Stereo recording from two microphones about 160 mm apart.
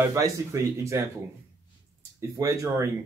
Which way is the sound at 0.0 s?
20° right (ahead or behind).